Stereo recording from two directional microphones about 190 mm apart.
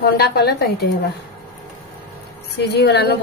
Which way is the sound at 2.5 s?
60° left (ahead or behind).